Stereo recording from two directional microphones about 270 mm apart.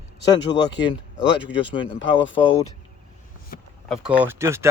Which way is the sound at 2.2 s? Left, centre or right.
Left.